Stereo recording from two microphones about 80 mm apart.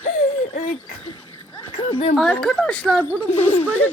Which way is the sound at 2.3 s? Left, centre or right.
Centre.